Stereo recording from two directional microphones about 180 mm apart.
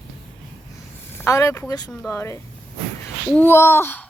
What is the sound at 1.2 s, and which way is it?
Speech, 15° left (ahead or behind).